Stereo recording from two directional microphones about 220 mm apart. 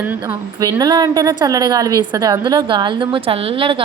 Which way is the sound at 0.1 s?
15° right (ahead or behind).